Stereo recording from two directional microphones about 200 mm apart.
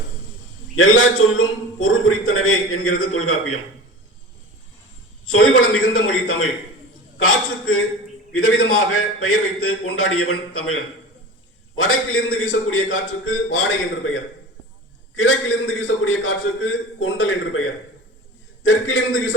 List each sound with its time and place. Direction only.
0.8 s a man's voice: 85° left
5.3 s a man's voice: 90° left
8.3 s a man's voice: 90° left
11.8 s a man's voice: 90° left
15.1 s a man's voice: 70° left (ahead or behind); by 17.7 s 85° left
18.6 s a man's voice: 75° left (ahead or behind)